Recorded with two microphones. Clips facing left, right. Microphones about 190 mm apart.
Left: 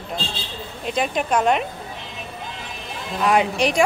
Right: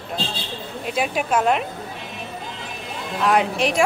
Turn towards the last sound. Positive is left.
turn(degrees=0)  # may be behind; listen again after turning